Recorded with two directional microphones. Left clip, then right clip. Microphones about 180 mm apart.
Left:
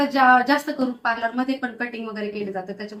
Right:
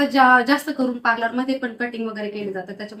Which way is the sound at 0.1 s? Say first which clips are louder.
Right 1 dB; 15° right (ahead or behind).